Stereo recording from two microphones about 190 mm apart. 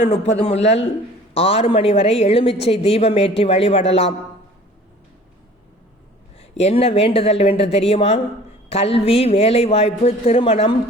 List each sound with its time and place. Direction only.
0.0 s a woman's voice: 40° left (ahead or behind)
6.4 s a woman's voice: 35° left (ahead or behind)